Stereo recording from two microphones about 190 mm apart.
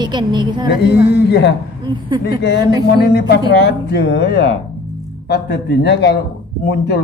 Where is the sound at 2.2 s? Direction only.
60° left (ahead or behind).